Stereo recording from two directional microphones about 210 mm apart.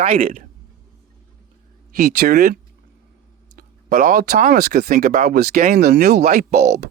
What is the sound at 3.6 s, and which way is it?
Speech, 40° right (ahead or behind).